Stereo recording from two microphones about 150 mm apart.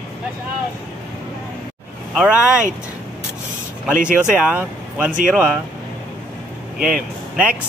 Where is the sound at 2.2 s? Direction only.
5° right (ahead or behind).